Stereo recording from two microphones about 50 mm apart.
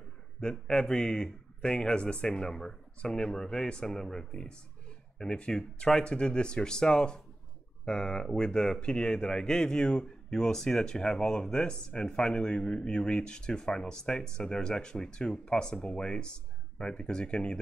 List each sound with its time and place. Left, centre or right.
0.4 s speech: centre